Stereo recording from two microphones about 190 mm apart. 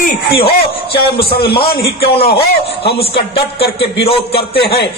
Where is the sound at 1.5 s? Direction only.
30° left (ahead or behind).